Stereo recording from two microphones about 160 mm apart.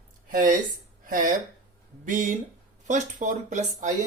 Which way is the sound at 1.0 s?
60° right (ahead or behind).